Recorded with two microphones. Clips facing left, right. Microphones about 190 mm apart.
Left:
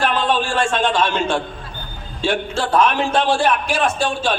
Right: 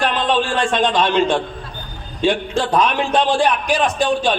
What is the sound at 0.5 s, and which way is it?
A man's voice, 15° right (ahead or behind).